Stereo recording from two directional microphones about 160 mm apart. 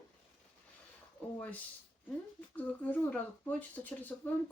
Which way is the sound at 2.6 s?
10° left (ahead or behind).